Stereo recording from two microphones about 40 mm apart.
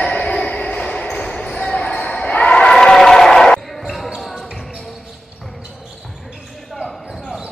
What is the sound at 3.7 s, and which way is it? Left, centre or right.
Basketball bounce, centre.